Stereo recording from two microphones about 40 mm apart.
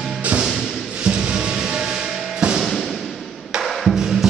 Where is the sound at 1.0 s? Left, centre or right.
Right.